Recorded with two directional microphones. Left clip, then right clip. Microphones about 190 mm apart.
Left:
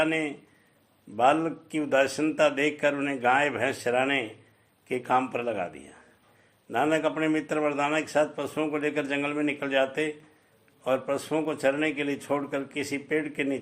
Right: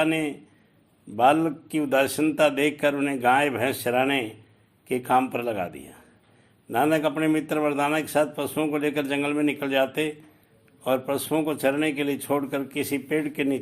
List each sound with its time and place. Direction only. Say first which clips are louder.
0.0 s a man's voice: right 2 dB; 30° right (ahead or behind)